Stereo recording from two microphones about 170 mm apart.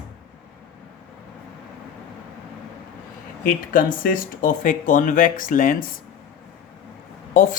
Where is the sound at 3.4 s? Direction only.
55° left (ahead or behind).